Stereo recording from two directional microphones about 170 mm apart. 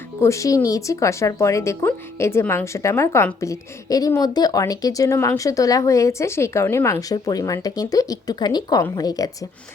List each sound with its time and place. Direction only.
0.2 s speech: 20° left (ahead or behind)